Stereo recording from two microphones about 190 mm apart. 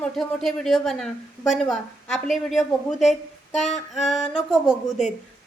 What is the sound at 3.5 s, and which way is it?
Female singing, 35° left (ahead or behind).